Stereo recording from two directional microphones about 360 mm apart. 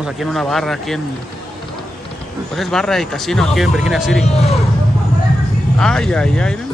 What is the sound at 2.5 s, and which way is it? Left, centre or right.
Speech, centre.